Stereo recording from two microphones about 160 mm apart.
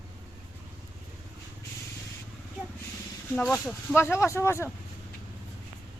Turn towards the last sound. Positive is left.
turn(degrees=15)  # may be behind; listen again after turning